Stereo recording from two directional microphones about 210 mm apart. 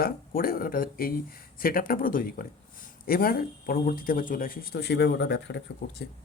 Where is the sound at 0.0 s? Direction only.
45° left (ahead or behind).